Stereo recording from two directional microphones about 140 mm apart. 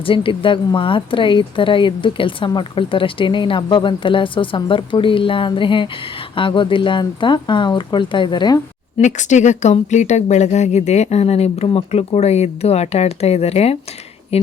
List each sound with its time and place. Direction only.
0.0 s speech: 40° left (ahead or behind)
9.0 s a woman's voice: 60° left (ahead or behind)